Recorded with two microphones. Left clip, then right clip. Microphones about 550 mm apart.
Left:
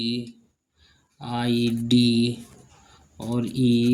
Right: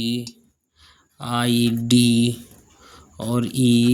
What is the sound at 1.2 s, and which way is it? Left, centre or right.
Speech, right.